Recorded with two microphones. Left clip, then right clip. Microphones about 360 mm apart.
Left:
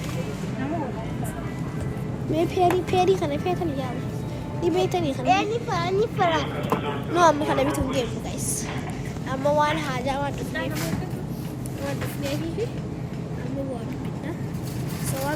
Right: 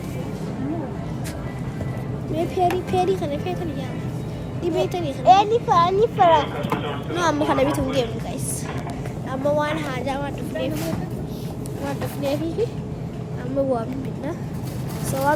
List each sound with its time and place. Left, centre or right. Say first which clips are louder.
2.3 s speech: even; centre
5.2 s speech: right 9 dB; centre
7.3 s speech: right 3 dB; centre
9.3 s speech: even; centre